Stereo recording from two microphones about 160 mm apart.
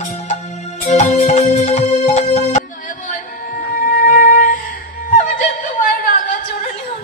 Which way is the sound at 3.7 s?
55° left (ahead or behind).